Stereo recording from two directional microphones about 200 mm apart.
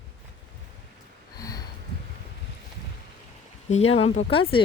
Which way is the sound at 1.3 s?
20° left (ahead or behind).